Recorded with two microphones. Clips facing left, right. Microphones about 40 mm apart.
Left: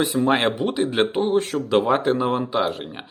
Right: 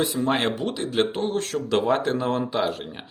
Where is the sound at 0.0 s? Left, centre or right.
Centre.